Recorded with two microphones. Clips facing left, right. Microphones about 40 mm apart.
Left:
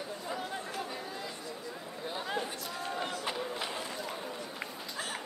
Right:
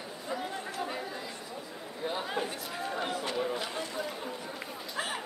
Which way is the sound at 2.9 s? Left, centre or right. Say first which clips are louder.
Right 2 dB; centre.